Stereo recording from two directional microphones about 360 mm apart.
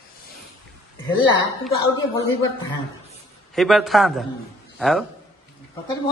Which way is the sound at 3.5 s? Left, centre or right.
Centre.